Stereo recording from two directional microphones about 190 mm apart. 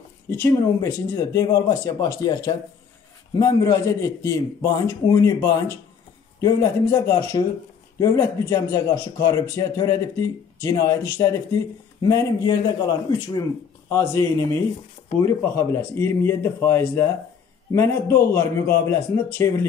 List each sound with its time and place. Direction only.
0.3 s speech: 15° left (ahead or behind)
6.4 s a man's voice: 15° left (ahead or behind)